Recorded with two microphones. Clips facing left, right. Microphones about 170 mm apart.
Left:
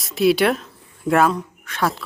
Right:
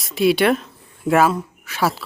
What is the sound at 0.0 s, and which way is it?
Speech, centre (ahead or behind).